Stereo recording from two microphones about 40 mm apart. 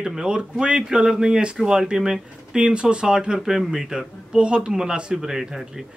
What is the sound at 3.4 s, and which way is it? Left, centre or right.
Speech, centre.